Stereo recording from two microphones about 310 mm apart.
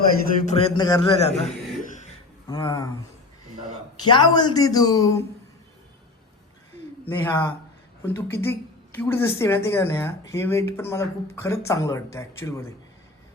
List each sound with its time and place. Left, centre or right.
0.4 s speech: centre
1.9 s throat clearing: left
2.5 s speech: centre
4.1 s speech: centre
7.0 s a man's voice: centre